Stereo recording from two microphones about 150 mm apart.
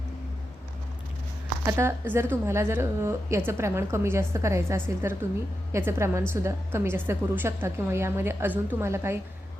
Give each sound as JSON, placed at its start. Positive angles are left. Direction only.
{"t": 1.6, "sound": "a woman's voice", "side_deg": -15}